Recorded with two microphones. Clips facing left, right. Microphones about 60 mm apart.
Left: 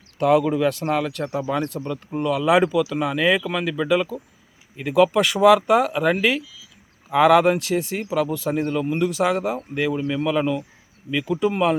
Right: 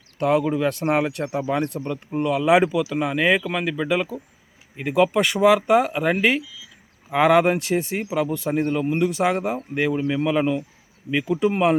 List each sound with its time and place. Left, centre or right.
0.2 s speech: centre
0.9 s speech: right
1.1 s speech: centre